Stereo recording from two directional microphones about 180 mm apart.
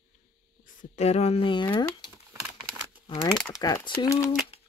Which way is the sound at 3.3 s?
5° left (ahead or behind).